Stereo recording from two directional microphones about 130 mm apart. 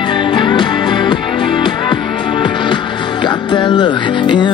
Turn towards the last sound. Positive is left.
turn(degrees=35)  # may be behind; listen again after turning